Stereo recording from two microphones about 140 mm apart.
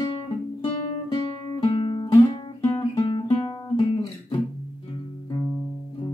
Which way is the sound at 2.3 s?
35° left (ahead or behind).